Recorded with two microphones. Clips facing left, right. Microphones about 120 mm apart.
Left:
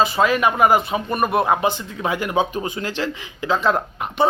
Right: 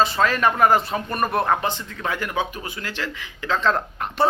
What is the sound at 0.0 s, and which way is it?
A man's voice, 5° left (ahead or behind).